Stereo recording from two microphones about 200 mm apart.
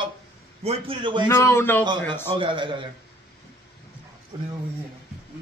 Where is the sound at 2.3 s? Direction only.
25° right (ahead or behind).